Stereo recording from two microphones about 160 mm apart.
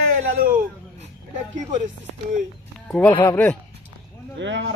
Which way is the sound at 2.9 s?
10° left (ahead or behind).